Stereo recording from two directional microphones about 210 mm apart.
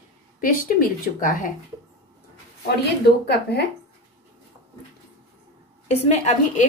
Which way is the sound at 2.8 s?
50° left (ahead or behind).